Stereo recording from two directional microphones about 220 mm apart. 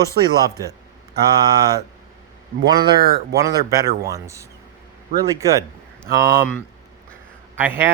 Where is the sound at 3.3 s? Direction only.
15° right (ahead or behind).